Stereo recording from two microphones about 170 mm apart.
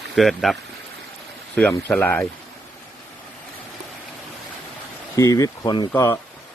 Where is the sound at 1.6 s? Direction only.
10° left (ahead or behind).